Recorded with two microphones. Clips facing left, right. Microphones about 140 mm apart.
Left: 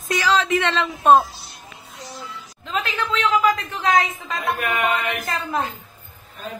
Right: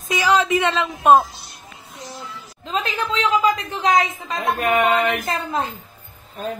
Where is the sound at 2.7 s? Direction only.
15° right (ahead or behind).